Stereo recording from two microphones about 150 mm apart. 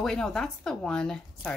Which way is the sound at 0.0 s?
5° left (ahead or behind).